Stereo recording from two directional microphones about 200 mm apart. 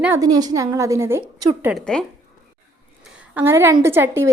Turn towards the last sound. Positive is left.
turn(degrees=-10)  # may be behind; listen again after turning